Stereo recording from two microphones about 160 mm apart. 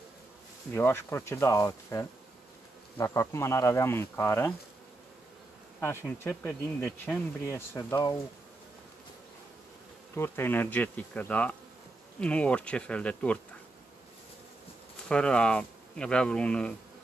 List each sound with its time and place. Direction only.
0.7 s speech: 15° left (ahead or behind)
5.8 s speech: 15° left (ahead or behind)
10.1 s speech: 15° left (ahead or behind)
15.0 s speech: 5° left (ahead or behind)